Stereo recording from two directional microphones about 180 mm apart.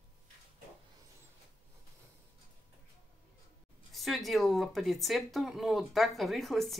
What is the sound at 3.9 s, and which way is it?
Speech, centre (ahead or behind).